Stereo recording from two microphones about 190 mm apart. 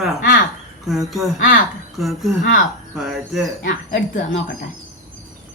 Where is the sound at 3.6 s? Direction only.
45° left (ahead or behind).